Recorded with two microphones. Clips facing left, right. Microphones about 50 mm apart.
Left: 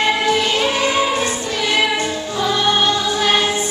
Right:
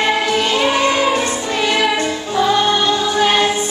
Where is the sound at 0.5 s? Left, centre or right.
Centre.